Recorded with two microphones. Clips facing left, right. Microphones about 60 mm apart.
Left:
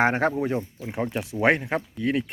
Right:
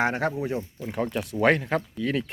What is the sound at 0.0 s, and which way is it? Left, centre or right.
Speech, left.